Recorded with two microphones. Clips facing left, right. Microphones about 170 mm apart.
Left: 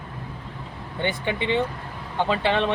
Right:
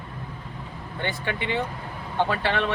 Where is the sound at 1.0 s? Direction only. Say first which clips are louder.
Left 4 dB; 20° left (ahead or behind).